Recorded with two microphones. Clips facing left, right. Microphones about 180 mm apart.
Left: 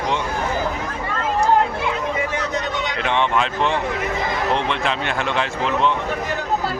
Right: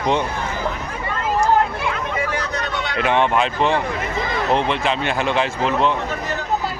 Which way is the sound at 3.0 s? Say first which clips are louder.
Right 3 dB; 5° right (ahead or behind).